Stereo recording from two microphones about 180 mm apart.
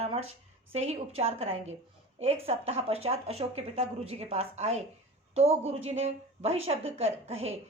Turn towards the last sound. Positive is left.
turn(degrees=-35)  # may be behind; listen again after turning